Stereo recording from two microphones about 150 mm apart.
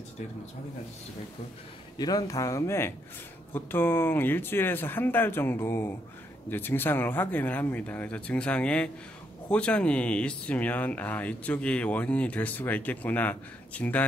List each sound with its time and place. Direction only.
2.0 s speech: 25° left (ahead or behind); by 14.0 s 10° left (ahead or behind)